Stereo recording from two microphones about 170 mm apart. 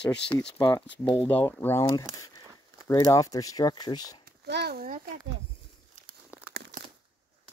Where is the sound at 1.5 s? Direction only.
10° left (ahead or behind).